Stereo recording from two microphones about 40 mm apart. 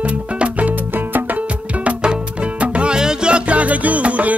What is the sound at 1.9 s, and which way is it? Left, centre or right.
Music, right.